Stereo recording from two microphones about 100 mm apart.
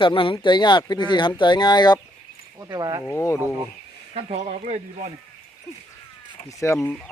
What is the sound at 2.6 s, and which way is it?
Speech, 40° right (ahead or behind).